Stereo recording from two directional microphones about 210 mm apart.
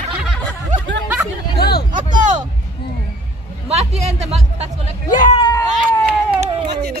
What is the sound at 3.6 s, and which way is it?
Speech, 30° right (ahead or behind).